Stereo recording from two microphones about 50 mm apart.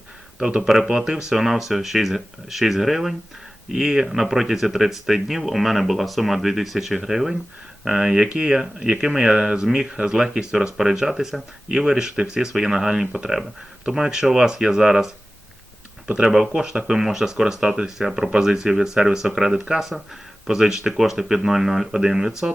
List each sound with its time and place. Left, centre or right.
0.3 s speech: centre
16.0 s speech: right